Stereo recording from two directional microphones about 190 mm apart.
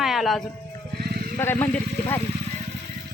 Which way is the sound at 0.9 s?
55° right (ahead or behind).